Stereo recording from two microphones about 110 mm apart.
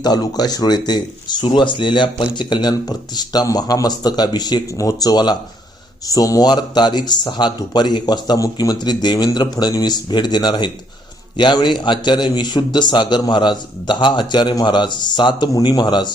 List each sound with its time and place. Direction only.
0.0 s a man's voice: 40° left (ahead or behind)